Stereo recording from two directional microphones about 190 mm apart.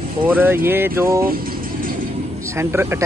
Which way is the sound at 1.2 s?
50° right (ahead or behind).